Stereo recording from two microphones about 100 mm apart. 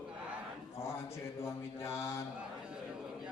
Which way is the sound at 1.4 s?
25° left (ahead or behind).